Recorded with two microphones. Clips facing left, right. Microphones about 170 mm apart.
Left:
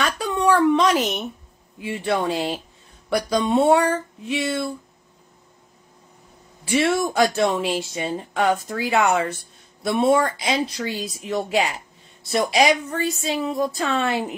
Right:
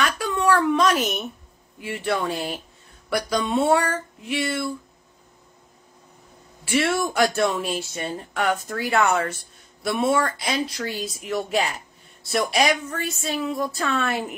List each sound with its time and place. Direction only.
0.2 s a sound: 25° left (ahead or behind)
0.9 s speech: centre (ahead or behind)
1.8 s a woman's voice: 20° left (ahead or behind)
6.7 s a woman's voice: 20° left (ahead or behind)